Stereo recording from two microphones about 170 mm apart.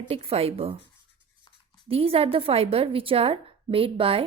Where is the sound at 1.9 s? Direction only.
35° right (ahead or behind).